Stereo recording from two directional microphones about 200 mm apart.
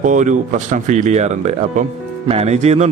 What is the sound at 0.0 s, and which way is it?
Speech, 40° right (ahead or behind).